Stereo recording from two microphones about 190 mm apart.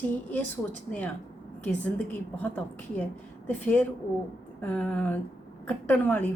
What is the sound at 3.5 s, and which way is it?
A woman's voice, 10° left (ahead or behind).